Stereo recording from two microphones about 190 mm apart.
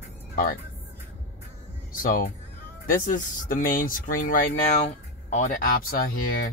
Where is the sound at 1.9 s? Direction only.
45° left (ahead or behind).